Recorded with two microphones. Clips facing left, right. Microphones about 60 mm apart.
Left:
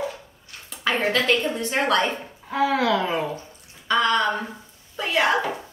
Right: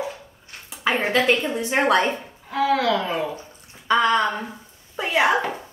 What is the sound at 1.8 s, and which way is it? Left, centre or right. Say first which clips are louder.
Speech: right 3 dB; right.